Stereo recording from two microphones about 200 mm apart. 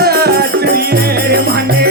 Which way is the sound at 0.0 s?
50° right (ahead or behind).